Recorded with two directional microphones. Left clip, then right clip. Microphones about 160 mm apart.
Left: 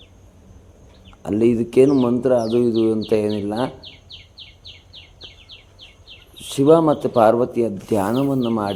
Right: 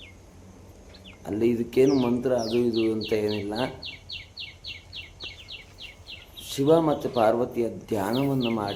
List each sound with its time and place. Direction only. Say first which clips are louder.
1.2 s speech: left 7 dB; 40° left (ahead or behind)
6.5 s speech: left 7 dB; 40° left (ahead or behind)